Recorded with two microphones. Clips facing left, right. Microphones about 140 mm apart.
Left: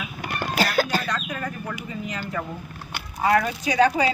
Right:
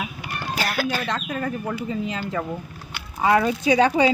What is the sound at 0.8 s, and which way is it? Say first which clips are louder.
Speech: left 1 dB; 40° left (ahead or behind).